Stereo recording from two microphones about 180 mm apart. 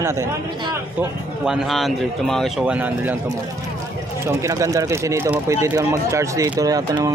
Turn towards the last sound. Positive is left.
turn(degrees=-20)  # may be behind; listen again after turning